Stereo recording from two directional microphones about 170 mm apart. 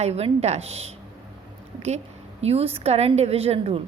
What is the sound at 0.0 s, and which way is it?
Speech, 40° right (ahead or behind).